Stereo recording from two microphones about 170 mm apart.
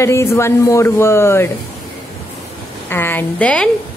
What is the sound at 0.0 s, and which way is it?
Speech, 15° left (ahead or behind).